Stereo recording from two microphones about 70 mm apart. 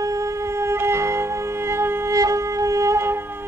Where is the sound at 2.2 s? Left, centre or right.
Right.